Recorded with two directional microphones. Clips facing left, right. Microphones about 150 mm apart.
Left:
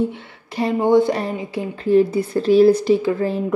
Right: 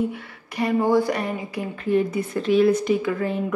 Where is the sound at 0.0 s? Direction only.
30° left (ahead or behind).